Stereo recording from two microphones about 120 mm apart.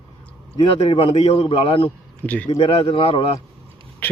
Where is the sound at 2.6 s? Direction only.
45° left (ahead or behind).